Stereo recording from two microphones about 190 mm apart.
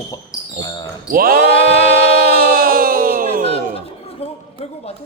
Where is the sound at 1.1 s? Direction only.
50° right (ahead or behind).